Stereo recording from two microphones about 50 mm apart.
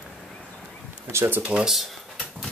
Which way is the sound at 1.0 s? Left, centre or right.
Right.